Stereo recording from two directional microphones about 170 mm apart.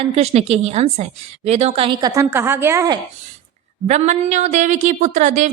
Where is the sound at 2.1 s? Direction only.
15° right (ahead or behind).